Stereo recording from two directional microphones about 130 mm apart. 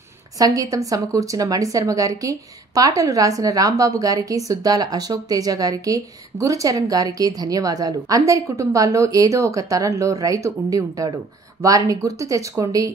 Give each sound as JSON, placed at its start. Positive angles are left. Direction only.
{"t": 0.4, "sound": "a woman's voice", "side_deg": -25}